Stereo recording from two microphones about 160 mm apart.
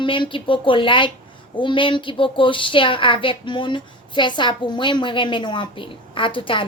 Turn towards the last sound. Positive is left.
turn(degrees=30)  # may be behind; listen again after turning